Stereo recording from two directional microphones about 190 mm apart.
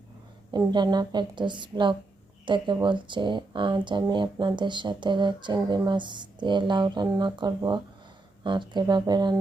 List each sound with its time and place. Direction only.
0.5 s speech: 25° right (ahead or behind)